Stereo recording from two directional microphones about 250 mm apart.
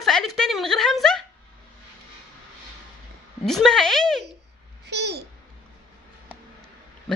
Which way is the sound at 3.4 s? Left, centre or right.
Centre.